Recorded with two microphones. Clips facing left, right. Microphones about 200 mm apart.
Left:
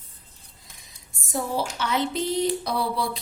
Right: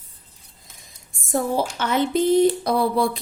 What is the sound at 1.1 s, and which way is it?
Speech, 50° right (ahead or behind).